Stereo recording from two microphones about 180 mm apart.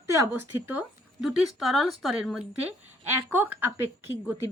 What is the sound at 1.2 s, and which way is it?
A woman's voice, centre (ahead or behind).